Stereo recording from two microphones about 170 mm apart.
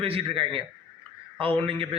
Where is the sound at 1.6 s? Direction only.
30° right (ahead or behind).